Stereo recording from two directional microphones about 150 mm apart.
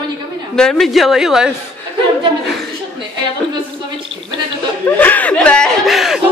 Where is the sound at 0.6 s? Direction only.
5° left (ahead or behind).